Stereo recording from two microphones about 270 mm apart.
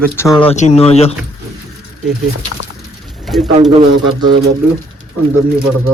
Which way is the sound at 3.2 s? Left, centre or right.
Centre.